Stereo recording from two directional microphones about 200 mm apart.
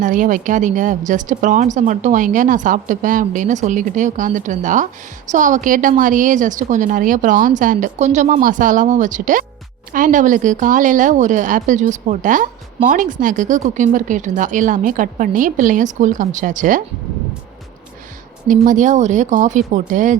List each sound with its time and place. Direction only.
0.0 s a woman's voice: 40° right (ahead or behind)
18.4 s a woman's voice: 40° right (ahead or behind)